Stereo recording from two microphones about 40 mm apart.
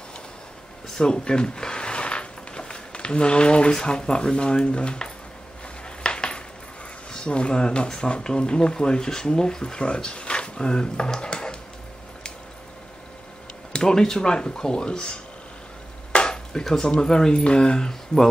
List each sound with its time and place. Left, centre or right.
1.0 s speech: left
6.0 s a sound: left
7.1 s speech: left
13.7 s speech: centre
16.1 s a sound: left
16.9 s speech: centre